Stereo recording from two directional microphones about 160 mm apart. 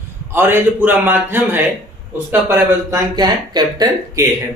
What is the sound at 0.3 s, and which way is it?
A man's voice, 15° right (ahead or behind).